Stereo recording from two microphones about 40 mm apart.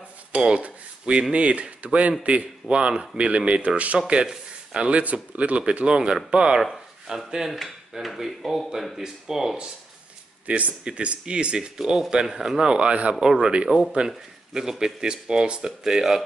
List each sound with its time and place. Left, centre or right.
0.3 s cutlery: right
1.3 s speech: right
2.7 s speech: right
7.4 s dishes: centre
8.6 s speech: centre
10.4 s speech: right; by 13.5 s centre
13.7 s dishes: centre
13.9 s speech: centre
15.8 s speech: centre